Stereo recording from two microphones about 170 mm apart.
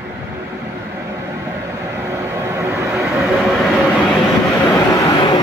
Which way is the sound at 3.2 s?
Centre (ahead or behind).